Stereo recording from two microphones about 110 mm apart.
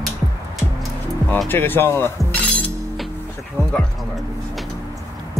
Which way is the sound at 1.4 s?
20° left (ahead or behind).